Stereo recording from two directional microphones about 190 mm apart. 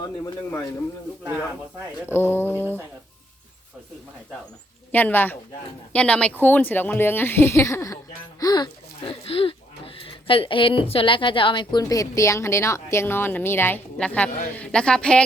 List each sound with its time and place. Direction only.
2.0 s speech: 10° left (ahead or behind)
4.9 s a woman's voice: 10° left (ahead or behind)